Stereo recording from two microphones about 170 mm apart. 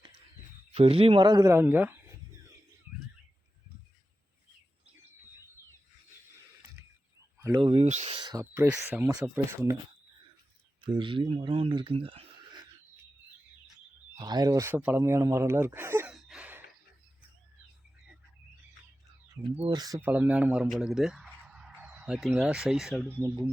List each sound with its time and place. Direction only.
0.7 s speech: 35° right (ahead or behind); by 2.0 s 10° right (ahead or behind)
6.8 s a sound: 15° right (ahead or behind)
7.6 s speech: 35° right (ahead or behind)
8.2 s speech: 25° right (ahead or behind)
8.7 s speech: 10° right (ahead or behind)
10.8 s speech: 30° right (ahead or behind)
14.2 s speech: 25° right (ahead or behind)
16.1 s a sound: 5° right (ahead or behind)
19.5 s speech: 25° right (ahead or behind)
20.0 s speech: 10° right (ahead or behind)